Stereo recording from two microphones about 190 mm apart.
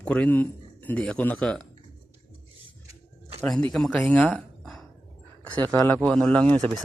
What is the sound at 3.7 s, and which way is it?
A man's voice, 5° left (ahead or behind).